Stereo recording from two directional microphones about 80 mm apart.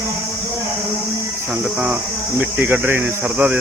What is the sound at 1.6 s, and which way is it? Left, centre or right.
Speech, centre.